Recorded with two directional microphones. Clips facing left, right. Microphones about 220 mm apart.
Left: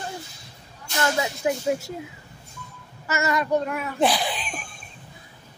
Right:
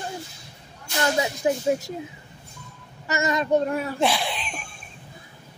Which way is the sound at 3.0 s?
20° right (ahead or behind).